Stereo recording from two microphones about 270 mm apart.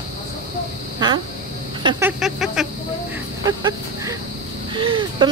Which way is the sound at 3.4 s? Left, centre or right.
Centre.